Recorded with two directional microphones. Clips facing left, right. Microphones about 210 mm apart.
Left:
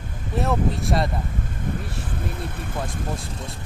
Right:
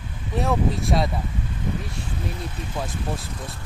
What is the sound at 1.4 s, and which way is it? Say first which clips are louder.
Speech: even; 55° left (ahead or behind).